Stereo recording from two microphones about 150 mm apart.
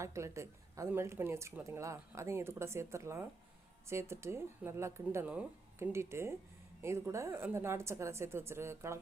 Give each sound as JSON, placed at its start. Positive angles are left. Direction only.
{"t": 0.0, "sound": "a woman's voice", "side_deg": -20}
{"t": 5.3, "sound": "a woman's voice", "side_deg": -5}